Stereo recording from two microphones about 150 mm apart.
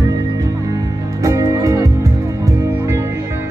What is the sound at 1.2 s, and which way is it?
Music, 25° right (ahead or behind).